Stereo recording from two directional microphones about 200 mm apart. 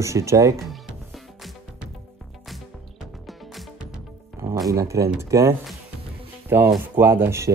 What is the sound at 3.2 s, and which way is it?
Music, centre (ahead or behind).